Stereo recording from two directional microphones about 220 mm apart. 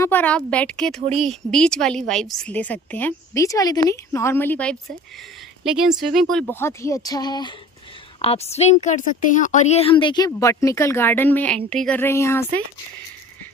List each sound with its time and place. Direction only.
0.0 s a woman's voice: 10° left (ahead or behind)